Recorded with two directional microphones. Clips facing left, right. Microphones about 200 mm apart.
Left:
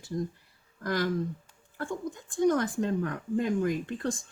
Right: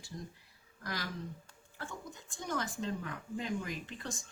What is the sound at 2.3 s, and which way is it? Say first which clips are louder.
Speech: left 13 dB; 55° left (ahead or behind).